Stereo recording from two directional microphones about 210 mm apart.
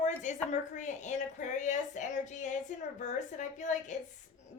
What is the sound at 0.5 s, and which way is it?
A woman's voice, 35° left (ahead or behind).